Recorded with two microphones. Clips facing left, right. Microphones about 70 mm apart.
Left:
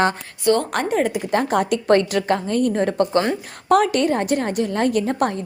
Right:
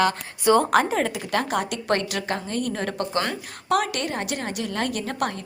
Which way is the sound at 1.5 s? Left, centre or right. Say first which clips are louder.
Left 7 dB; left.